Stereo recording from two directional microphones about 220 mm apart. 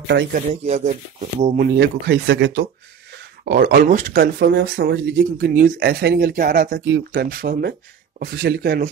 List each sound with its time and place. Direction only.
0.1 s speech: 50° right (ahead or behind)
0.5 s speech: 30° right (ahead or behind)
1.8 s speech: 50° right (ahead or behind)